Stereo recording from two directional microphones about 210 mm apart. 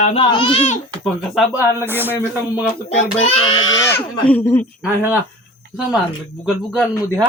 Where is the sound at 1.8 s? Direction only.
10° right (ahead or behind).